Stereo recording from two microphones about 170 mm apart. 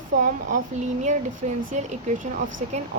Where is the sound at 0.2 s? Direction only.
50° right (ahead or behind).